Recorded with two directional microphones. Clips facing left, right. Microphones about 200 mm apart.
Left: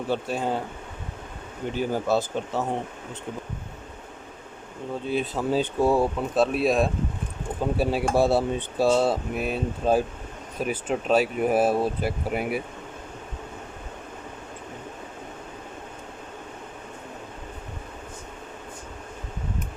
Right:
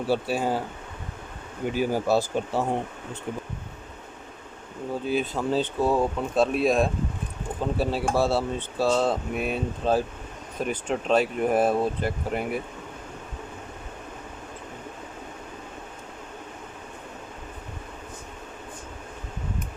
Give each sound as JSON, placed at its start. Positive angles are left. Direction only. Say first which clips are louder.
{"t": 0.1, "sound": "speech", "louder": "right 2 dB", "side_deg": -5}
{"t": 1.6, "sound": "speech", "louder": "right 2 dB", "side_deg": -10}
{"t": 5.0, "sound": "speech", "louder": "even", "side_deg": 0}
{"t": 7.6, "sound": "speech", "louder": "left 2 dB", "side_deg": 15}
{"t": 9.3, "sound": "speech", "louder": "even", "side_deg": 0}